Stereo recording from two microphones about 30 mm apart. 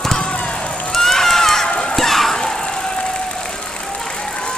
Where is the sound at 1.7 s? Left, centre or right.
Left.